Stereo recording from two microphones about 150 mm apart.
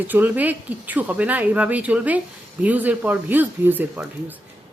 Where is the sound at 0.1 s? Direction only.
10° right (ahead or behind).